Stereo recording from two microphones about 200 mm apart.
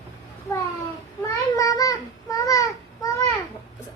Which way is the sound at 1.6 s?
15° left (ahead or behind).